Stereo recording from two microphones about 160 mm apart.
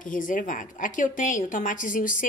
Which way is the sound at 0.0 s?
55° left (ahead or behind).